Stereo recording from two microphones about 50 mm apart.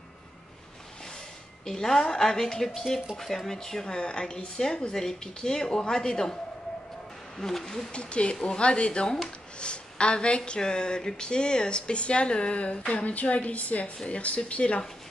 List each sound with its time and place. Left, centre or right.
1.7 s speech: centre
7.3 s speech: centre
7.9 s speech: left